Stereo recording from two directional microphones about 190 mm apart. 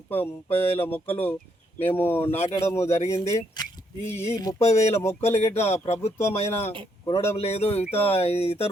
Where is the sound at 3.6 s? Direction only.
20° left (ahead or behind).